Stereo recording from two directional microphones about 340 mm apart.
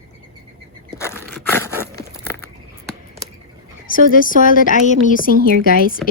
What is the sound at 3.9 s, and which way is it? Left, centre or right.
Speech, left.